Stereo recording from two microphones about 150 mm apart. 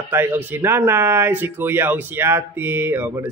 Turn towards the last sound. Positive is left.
turn(degrees=-15)  # may be behind; listen again after turning